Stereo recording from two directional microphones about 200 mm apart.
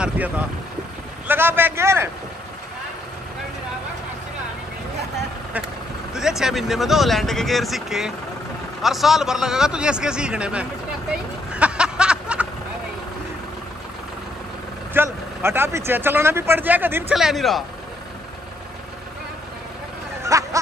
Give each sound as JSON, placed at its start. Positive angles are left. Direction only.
{"t": 0.0, "sound": "a man's voice", "side_deg": -10}
{"t": 6.1, "sound": "speech", "side_deg": -5}
{"t": 11.5, "sound": "a sound", "side_deg": -5}
{"t": 15.0, "sound": "a man's voice", "side_deg": -10}
{"t": 20.3, "sound": "music", "side_deg": -15}